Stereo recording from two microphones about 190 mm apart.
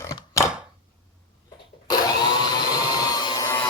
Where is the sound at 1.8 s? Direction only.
20° left (ahead or behind).